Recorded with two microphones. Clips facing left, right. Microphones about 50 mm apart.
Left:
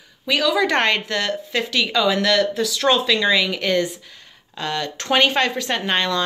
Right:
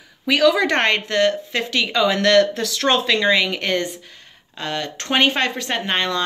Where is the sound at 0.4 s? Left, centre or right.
Right.